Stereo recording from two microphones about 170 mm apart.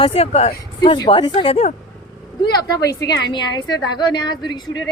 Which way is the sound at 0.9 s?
25° left (ahead or behind).